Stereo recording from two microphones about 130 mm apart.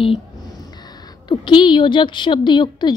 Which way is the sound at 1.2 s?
35° left (ahead or behind).